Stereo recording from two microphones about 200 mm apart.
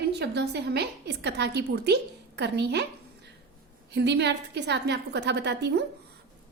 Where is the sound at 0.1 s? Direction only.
55° right (ahead or behind).